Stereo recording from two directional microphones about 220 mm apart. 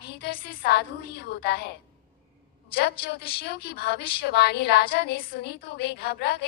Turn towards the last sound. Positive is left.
turn(degrees=45)  # may be behind; listen again after turning